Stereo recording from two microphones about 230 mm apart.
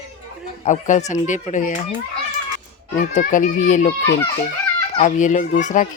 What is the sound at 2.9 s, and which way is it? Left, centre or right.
Speech, left.